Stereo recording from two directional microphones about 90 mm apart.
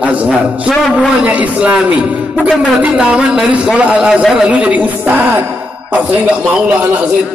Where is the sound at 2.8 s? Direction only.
10° right (ahead or behind).